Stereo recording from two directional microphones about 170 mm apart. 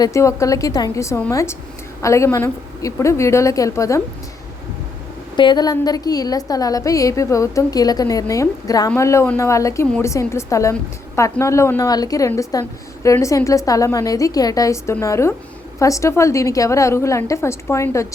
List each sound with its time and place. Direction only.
0.0 s a woman's voice: 15° left (ahead or behind)
5.4 s a woman's voice: 25° left (ahead or behind)